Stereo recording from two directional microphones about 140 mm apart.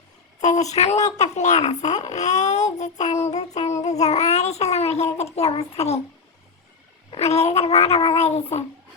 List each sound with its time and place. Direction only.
0.3 s a child's voice: 55° left (ahead or behind)
7.1 s a child's voice: 50° left (ahead or behind)